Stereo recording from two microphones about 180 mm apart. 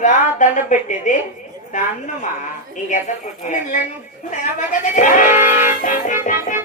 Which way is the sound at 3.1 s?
40° left (ahead or behind).